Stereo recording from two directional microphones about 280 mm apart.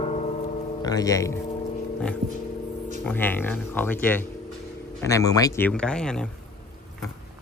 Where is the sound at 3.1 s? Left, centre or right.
Centre.